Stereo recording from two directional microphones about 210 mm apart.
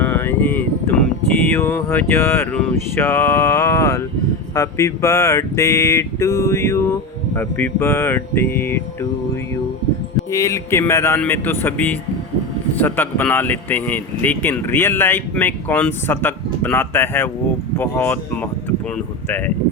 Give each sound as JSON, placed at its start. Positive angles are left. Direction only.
{"t": 0.0, "sound": "a sound", "side_deg": 10}
{"t": 1.5, "sound": "speech", "side_deg": 10}
{"t": 10.3, "sound": "speech", "side_deg": 15}